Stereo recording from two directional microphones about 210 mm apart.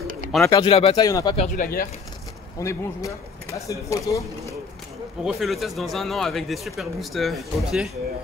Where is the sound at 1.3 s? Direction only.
40° left (ahead or behind).